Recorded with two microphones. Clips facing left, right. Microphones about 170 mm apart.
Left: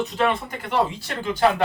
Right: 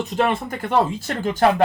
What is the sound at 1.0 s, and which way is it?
Speech, 45° right (ahead or behind).